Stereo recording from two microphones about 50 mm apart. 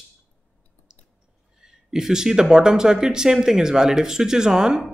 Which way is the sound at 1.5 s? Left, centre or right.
Centre.